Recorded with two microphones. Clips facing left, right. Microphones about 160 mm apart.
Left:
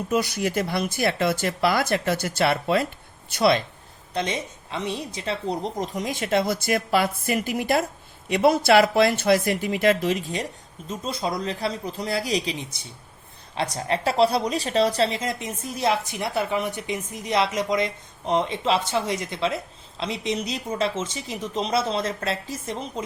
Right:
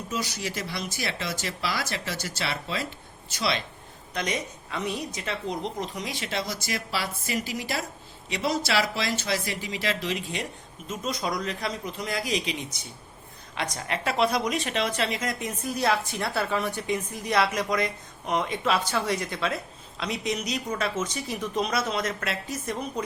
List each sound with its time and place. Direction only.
0.1 s speech: 55° left (ahead or behind)
4.1 s a woman's voice: 25° left (ahead or behind); by 10.4 s 45° left (ahead or behind)
10.8 s a man's voice: 30° left (ahead or behind)